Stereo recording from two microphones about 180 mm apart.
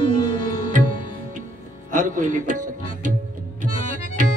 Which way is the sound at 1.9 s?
45° right (ahead or behind).